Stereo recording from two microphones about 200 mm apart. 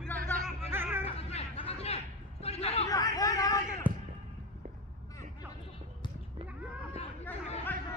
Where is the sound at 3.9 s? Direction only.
10° right (ahead or behind).